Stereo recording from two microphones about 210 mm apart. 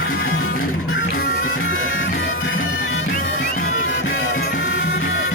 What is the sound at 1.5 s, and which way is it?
Music, 75° left (ahead or behind).